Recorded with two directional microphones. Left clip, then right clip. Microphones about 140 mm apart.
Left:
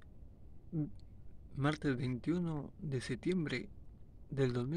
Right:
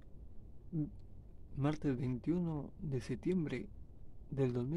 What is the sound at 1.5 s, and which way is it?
A man's voice, 20° right (ahead or behind).